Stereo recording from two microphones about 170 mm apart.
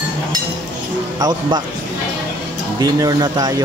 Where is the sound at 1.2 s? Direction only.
25° right (ahead or behind).